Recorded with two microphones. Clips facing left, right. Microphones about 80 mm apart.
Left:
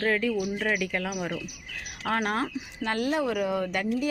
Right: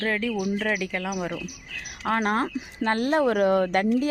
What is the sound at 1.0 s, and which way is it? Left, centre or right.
Speech, right.